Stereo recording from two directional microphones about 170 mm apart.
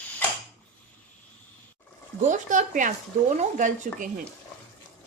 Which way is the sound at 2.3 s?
45° right (ahead or behind).